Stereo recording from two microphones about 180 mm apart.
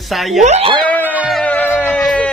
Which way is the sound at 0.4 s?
35° right (ahead or behind).